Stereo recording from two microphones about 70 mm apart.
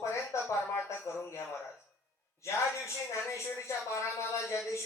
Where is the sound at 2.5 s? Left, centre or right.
Left.